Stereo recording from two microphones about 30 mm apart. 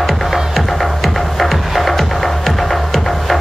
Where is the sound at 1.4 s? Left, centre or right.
Centre.